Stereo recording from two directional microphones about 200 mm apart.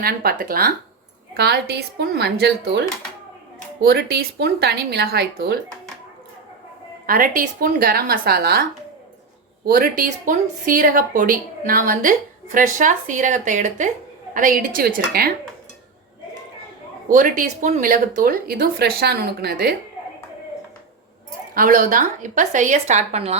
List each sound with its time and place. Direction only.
0.0 s speech: 50° right (ahead or behind)
3.8 s speech: 55° right (ahead or behind)
7.1 s speech: 45° right (ahead or behind)
9.6 s speech: 45° right (ahead or behind)
17.1 s speech: 40° right (ahead or behind)
21.5 s speech: 45° right (ahead or behind)